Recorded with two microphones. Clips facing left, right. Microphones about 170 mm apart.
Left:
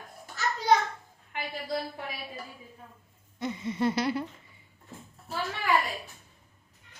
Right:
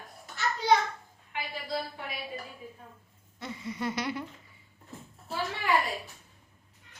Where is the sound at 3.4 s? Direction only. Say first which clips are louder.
Left 6 dB; 20° left (ahead or behind).